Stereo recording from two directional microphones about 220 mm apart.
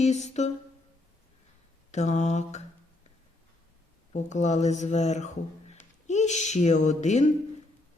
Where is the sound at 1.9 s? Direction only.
30° left (ahead or behind).